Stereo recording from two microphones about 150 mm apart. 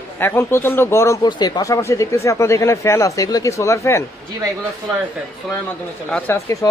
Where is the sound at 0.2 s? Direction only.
15° left (ahead or behind).